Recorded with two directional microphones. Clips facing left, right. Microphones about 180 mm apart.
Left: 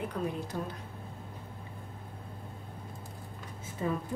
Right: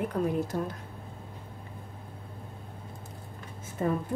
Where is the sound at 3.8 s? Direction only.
50° right (ahead or behind).